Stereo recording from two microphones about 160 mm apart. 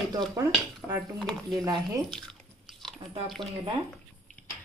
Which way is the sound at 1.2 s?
5° left (ahead or behind).